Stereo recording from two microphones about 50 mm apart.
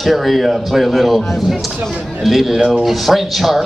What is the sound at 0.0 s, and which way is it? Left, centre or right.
Speech, centre.